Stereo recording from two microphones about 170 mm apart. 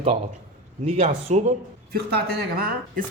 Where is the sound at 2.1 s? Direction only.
65° right (ahead or behind).